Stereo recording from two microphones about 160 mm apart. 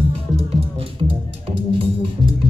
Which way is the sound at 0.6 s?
35° right (ahead or behind).